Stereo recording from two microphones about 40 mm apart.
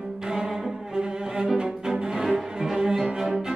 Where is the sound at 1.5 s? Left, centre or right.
Centre.